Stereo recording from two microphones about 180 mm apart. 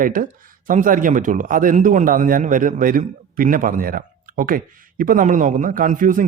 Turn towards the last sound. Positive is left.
turn(degrees=-45)  # may be behind; listen again after turning